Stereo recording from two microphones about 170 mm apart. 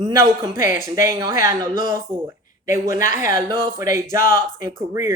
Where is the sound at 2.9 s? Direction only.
45° left (ahead or behind).